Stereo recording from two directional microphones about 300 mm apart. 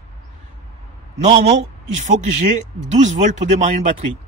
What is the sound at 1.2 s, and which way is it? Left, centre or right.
Speech, right.